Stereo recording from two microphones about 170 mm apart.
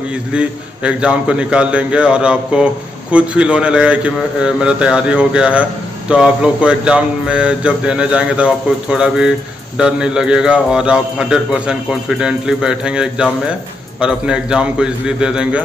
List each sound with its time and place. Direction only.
0.1 s a man's voice: 5° right (ahead or behind)